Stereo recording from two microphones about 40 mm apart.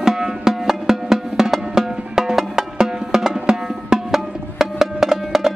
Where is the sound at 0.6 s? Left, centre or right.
Centre.